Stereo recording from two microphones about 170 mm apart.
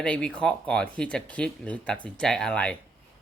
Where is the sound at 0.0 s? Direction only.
5° left (ahead or behind).